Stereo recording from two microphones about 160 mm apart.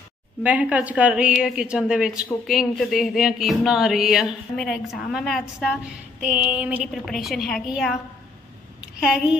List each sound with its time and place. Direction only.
0.4 s a woman's voice: 10° right (ahead or behind)